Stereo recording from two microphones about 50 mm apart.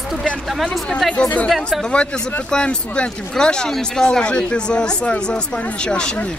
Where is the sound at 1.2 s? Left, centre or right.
Left.